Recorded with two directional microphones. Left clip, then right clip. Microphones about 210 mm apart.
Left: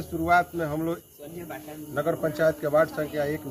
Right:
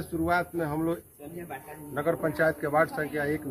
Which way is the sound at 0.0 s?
15° left (ahead or behind).